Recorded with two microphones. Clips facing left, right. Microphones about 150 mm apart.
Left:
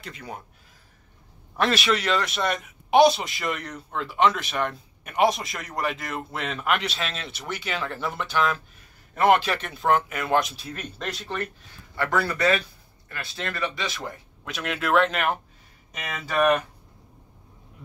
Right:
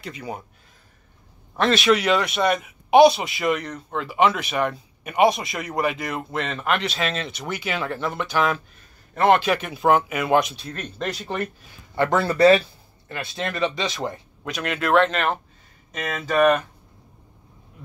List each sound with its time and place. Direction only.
0.0 s a man's voice: 5° right (ahead or behind)
1.6 s a man's voice: 5° left (ahead or behind)
9.5 s a man's voice: 5° right (ahead or behind)
11.9 s speech: 25° right (ahead or behind)
13.1 s speech: 20° right (ahead or behind)
14.4 s a man's voice: centre (ahead or behind)